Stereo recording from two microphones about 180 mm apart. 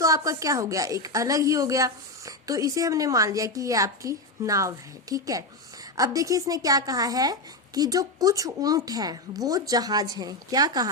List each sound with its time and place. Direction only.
0.0 s a woman's voice: 15° right (ahead or behind)